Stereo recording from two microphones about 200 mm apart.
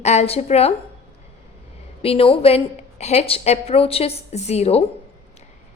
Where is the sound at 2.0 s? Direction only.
30° left (ahead or behind).